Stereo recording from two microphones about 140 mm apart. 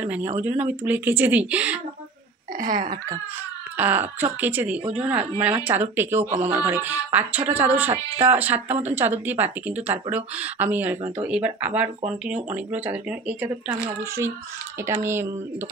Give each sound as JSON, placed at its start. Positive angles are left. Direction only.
{"t": 0.0, "sound": "speech", "side_deg": -10}
{"t": 2.6, "sound": "speech", "side_deg": -75}
{"t": 3.7, "sound": "speech", "side_deg": -15}
{"t": 8.6, "sound": "a woman's voice", "side_deg": -50}
{"t": 9.2, "sound": "speech", "side_deg": -15}
{"t": 14.9, "sound": "speech", "side_deg": -20}